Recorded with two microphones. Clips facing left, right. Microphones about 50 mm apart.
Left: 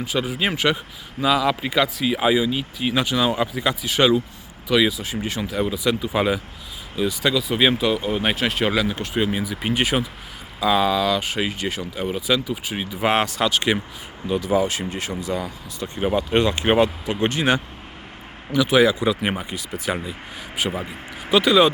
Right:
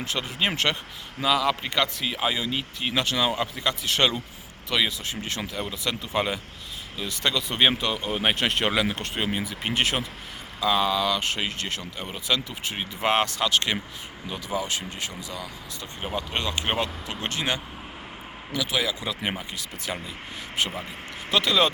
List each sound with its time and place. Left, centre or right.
0.0 s speech: centre; by 15.4 s left
16.0 s speech: centre
18.6 s speech: left
19.0 s speech: centre